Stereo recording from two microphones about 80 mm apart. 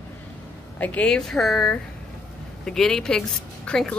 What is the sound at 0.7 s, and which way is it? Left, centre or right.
Speech, centre.